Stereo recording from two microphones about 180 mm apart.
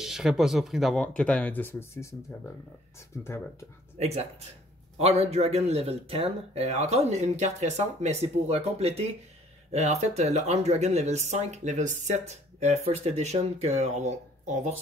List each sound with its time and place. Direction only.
0.0 s speech: centre (ahead or behind); by 2.5 s 15° left (ahead or behind)
4.0 s speech: 35° right (ahead or behind)